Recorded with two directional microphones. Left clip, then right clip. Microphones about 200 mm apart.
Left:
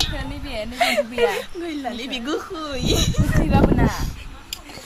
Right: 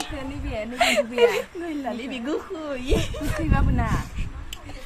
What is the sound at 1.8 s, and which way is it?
A woman's voice, 20° right (ahead or behind).